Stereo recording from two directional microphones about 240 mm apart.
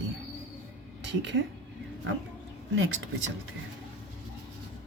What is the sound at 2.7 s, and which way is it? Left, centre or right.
Speech, right.